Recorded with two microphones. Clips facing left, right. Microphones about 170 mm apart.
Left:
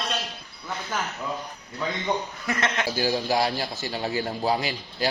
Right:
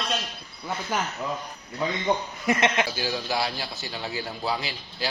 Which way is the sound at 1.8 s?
15° right (ahead or behind).